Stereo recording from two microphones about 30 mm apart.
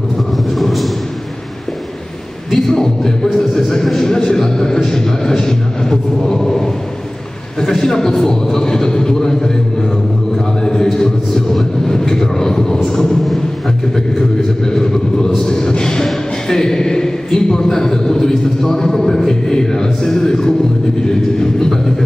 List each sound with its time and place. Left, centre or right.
0.6 s a sound: centre
2.5 s a man's voice: centre
4.1 s a man's voice: left
10.6 s music: left
11.9 s a man's voice: centre
14.6 s a man's voice: left